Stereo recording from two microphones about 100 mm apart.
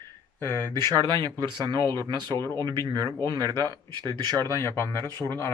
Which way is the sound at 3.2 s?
45° right (ahead or behind).